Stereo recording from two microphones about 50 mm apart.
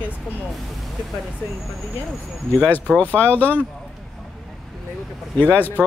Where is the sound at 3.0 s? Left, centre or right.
Left.